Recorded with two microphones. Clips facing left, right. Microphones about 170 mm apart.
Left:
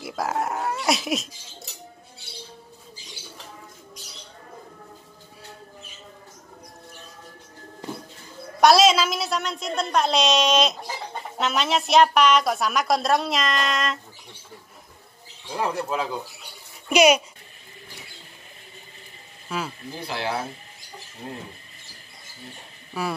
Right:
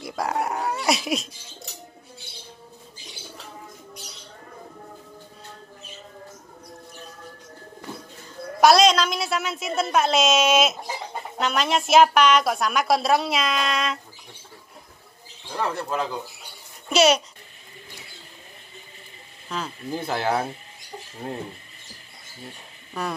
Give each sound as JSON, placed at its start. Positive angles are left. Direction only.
{"t": 0.0, "sound": "a woman's voice", "side_deg": 0}
{"t": 8.5, "sound": "a woman's voice", "side_deg": 0}
{"t": 15.5, "sound": "speech", "side_deg": 10}
{"t": 19.5, "sound": "speech", "side_deg": 10}
{"t": 19.9, "sound": "speech", "side_deg": -50}
{"t": 21.2, "sound": "a sound", "side_deg": -40}
{"t": 23.0, "sound": "speech", "side_deg": 5}